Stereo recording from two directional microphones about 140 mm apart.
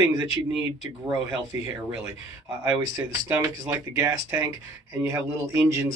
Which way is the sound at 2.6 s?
25° right (ahead or behind).